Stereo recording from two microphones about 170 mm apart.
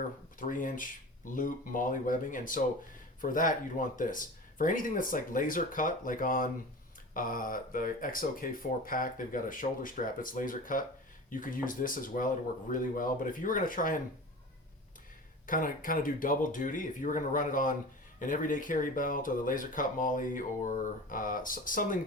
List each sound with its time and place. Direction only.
0.3 s speech: 55° left (ahead or behind)
15.4 s speech: 55° left (ahead or behind)